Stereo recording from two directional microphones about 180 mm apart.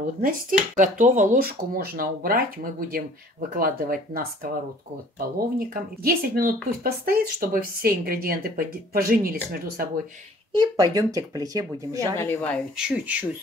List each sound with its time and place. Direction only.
0.2 s speech: 50° right (ahead or behind)
5.6 s speech: 55° right (ahead or behind)
10.5 s speech: 20° right (ahead or behind)
12.2 s speech: 10° left (ahead or behind)
12.7 s speech: 5° right (ahead or behind)